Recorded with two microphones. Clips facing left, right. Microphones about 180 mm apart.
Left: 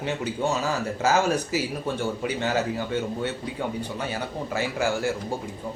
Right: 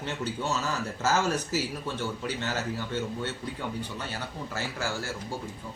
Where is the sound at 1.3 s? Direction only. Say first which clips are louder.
Left 4 dB; 10° left (ahead or behind).